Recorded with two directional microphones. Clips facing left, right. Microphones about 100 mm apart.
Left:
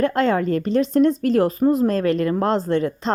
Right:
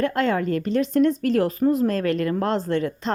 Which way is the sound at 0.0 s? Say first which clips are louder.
Left 3 dB; 25° left (ahead or behind).